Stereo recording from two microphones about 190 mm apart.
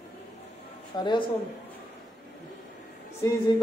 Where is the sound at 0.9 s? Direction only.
25° left (ahead or behind).